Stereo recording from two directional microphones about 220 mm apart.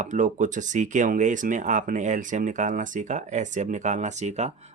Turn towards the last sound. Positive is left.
turn(degrees=-30)  # may be behind; listen again after turning